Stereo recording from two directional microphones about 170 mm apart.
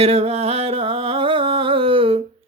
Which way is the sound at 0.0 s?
35° right (ahead or behind).